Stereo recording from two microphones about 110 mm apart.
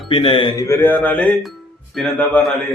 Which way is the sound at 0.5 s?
25° left (ahead or behind).